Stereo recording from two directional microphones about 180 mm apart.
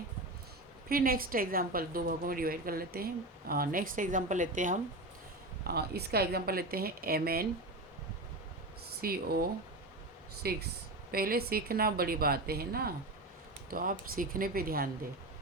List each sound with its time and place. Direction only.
0.9 s a woman's voice: 55° right (ahead or behind)
5.6 s a woman's voice: 60° right (ahead or behind)
9.0 s a woman's voice: 60° right (ahead or behind)